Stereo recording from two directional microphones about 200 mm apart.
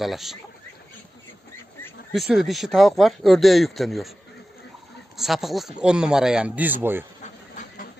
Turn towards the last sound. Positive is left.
turn(degrees=-10)  # may be behind; listen again after turning